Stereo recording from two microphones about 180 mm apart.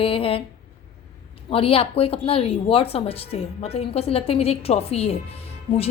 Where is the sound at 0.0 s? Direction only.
30° left (ahead or behind).